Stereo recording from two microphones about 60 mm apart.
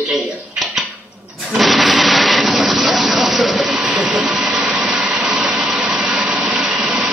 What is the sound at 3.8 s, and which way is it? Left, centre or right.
Printer, right.